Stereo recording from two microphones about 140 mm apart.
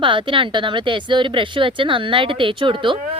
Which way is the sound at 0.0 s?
35° right (ahead or behind).